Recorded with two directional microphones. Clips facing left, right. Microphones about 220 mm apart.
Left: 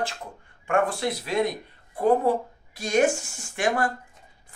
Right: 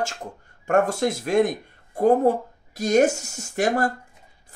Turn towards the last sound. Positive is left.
turn(degrees=-40)  # may be behind; listen again after turning